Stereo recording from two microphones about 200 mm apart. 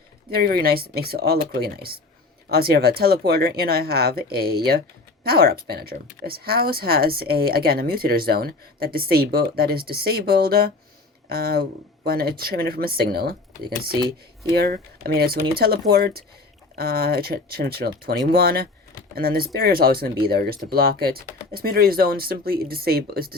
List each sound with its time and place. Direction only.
0.3 s speech: 50° right (ahead or behind)